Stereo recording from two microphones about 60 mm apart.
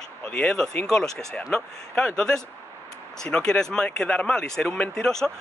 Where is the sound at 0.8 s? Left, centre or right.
Centre.